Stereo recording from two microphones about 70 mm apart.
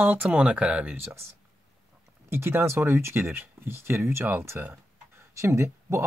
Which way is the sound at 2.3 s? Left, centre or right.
Right.